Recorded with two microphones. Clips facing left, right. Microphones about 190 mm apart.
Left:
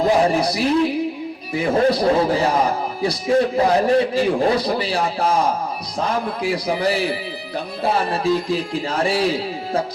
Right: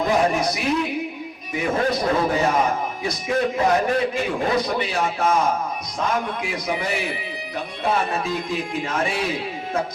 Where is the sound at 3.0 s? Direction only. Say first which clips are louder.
Left 7 dB; 35° left (ahead or behind).